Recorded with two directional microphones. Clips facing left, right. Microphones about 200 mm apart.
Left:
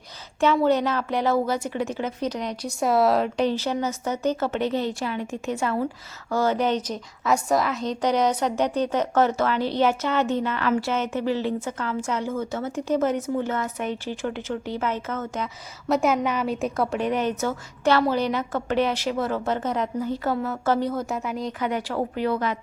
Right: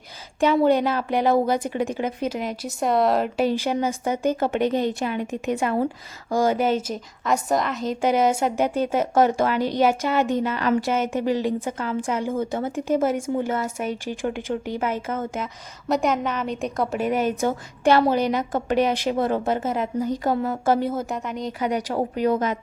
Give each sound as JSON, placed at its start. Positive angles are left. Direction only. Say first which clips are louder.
{"t": 0.6, "sound": "a woman's voice", "louder": "right 2 dB", "side_deg": -15}
{"t": 15.9, "sound": "a woman's voice", "louder": "left 1 dB", "side_deg": 5}
{"t": 19.6, "sound": "a woman's voice", "louder": "right 2 dB", "side_deg": -5}
{"t": 21.1, "sound": "a woman's voice", "louder": "even", "side_deg": 5}
{"t": 21.6, "sound": "a woman's voice", "louder": "right 3 dB", "side_deg": -15}
{"t": 22.1, "sound": "a woman's voice", "louder": "right 4 dB", "side_deg": -45}